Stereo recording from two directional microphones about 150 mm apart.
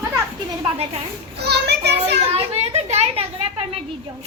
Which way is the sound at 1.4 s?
90° right.